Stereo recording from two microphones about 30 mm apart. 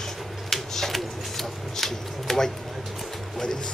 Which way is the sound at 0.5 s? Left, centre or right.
Centre.